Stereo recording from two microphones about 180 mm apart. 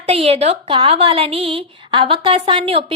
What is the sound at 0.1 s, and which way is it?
Speech, 35° right (ahead or behind).